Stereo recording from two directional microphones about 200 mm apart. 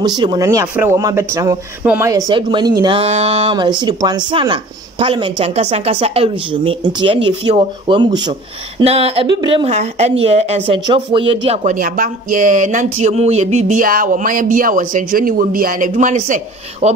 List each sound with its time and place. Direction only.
0.0 s speech: 20° right (ahead or behind)